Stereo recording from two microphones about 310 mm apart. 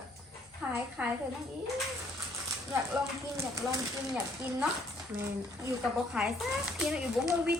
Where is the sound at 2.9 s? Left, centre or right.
Centre.